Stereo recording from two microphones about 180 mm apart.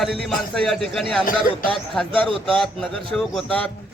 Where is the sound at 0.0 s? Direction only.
Centre (ahead or behind).